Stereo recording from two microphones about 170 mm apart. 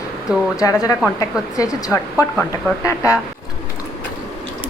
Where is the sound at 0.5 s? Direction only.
20° left (ahead or behind).